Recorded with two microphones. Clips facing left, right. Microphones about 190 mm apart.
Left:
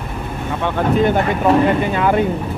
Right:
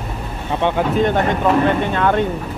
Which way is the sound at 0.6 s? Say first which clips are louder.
Right 3 dB; 20° right (ahead or behind).